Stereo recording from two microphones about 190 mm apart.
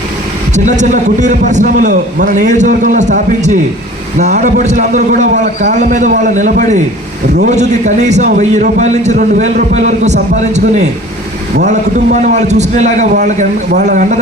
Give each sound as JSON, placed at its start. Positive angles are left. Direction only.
{"t": 0.5, "sound": "a man's voice", "side_deg": -40}
{"t": 11.6, "sound": "a man's voice", "side_deg": -40}